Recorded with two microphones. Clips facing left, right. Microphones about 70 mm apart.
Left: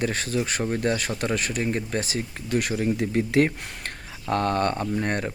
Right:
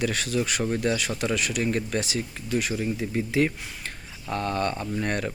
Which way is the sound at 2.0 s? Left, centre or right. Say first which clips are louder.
Even; left.